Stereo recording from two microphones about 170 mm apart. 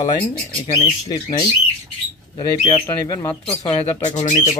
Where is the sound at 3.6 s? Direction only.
35° left (ahead or behind).